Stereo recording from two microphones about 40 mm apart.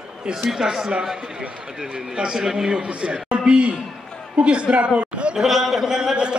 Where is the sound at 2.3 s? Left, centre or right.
Centre.